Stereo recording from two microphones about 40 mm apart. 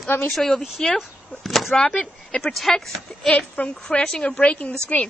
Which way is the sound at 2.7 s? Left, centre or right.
Centre.